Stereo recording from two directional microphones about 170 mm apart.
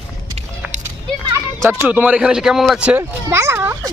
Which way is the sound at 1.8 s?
10° right (ahead or behind).